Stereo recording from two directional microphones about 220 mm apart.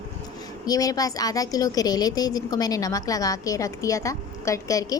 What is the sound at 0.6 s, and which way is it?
A woman's voice, 15° left (ahead or behind).